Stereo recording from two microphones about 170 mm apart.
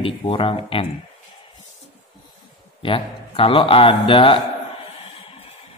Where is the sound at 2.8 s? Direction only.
30° left (ahead or behind).